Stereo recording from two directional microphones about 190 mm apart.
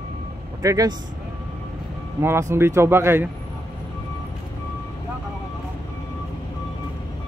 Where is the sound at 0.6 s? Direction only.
15° right (ahead or behind).